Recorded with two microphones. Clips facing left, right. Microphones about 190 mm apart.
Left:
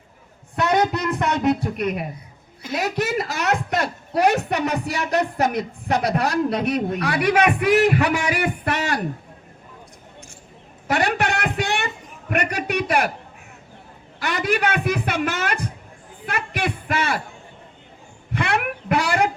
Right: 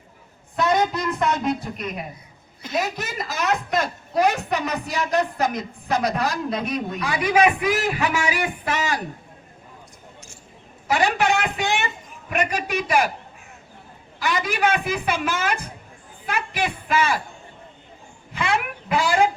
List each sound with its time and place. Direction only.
0.5 s speech: 70° left (ahead or behind)
2.6 s a woman's voice: 10° left (ahead or behind)
3.0 s speech: 70° left (ahead or behind)
10.8 s a sound: 60° left (ahead or behind)
12.3 s speech: 65° left (ahead or behind)
14.2 s a man's voice: 65° left (ahead or behind)
18.3 s a sound: 65° left (ahead or behind)